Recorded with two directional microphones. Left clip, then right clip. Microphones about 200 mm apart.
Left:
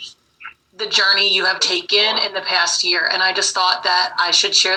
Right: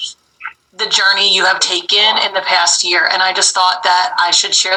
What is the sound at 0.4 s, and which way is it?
A woman's voice, 20° right (ahead or behind).